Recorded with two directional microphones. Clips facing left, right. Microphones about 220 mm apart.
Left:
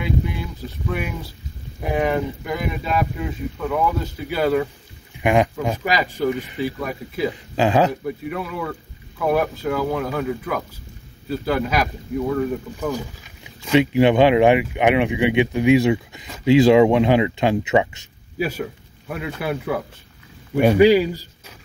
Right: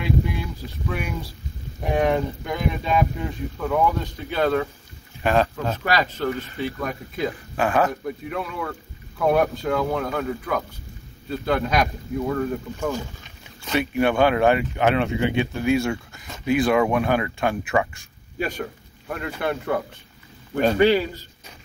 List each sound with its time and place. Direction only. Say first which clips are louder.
0.0 s boat: even; centre (ahead or behind)
1.8 s speech: even; 5° left (ahead or behind)
7.3 s speech: left 4 dB; 20° left (ahead or behind)
7.9 s speech: left 2 dB; 5° left (ahead or behind); by 18.0 s 20° left (ahead or behind)
18.4 s a man's voice: left 3 dB; 5° left (ahead or behind)